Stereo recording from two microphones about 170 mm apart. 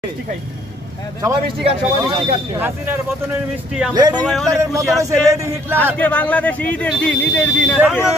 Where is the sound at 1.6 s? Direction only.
30° right (ahead or behind).